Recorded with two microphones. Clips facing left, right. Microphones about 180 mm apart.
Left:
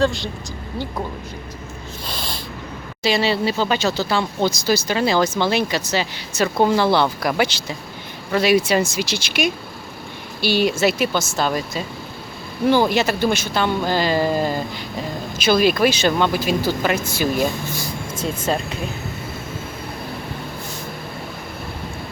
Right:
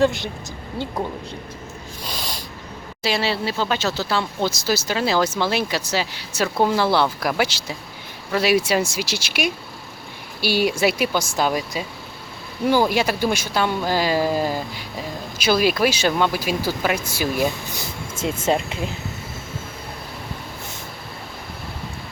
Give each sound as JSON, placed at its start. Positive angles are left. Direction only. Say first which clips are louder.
{"t": 0.0, "sound": "speech", "louder": "right 1 dB", "side_deg": -20}
{"t": 3.0, "sound": "speech", "louder": "left 4 dB", "side_deg": -5}
{"t": 17.7, "sound": "speech", "louder": "left 3 dB", "side_deg": -25}